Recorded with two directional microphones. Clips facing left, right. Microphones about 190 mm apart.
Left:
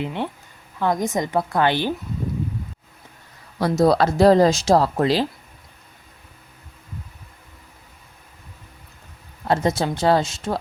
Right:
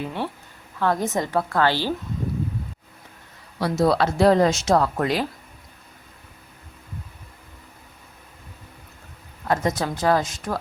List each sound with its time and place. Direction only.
0.0 s a woman's voice: 20° left (ahead or behind)
3.6 s speech: 40° left (ahead or behind)
9.5 s speech: 30° left (ahead or behind)